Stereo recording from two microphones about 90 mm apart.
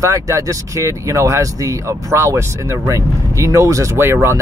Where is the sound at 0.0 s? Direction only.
35° right (ahead or behind).